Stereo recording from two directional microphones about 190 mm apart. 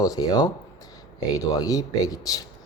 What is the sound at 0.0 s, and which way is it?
Speech, 20° left (ahead or behind).